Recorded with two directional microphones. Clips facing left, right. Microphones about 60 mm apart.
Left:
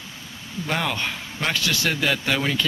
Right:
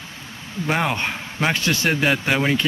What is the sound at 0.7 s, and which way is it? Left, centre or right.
Speech, right.